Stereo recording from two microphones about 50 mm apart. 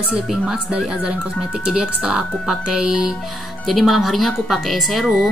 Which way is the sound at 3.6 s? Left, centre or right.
Centre.